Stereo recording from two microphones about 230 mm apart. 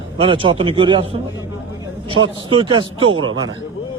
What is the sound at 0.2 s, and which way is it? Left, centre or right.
Speech, right.